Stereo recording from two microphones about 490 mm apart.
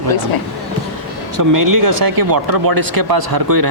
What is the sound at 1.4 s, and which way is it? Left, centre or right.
Speech, right.